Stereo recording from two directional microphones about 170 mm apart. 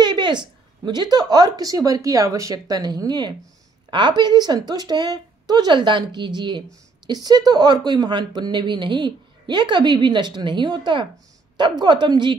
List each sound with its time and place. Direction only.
0.0 s a woman's voice: 25° right (ahead or behind)